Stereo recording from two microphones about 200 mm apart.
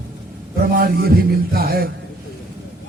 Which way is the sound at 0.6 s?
50° right (ahead or behind).